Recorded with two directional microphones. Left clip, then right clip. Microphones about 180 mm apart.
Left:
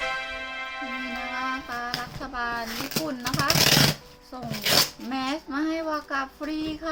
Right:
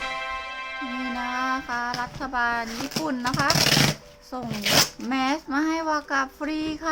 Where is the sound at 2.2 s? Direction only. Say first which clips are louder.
Right 6 dB; 55° right (ahead or behind).